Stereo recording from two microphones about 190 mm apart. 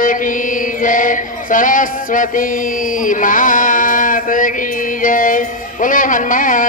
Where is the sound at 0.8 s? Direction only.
45° left (ahead or behind).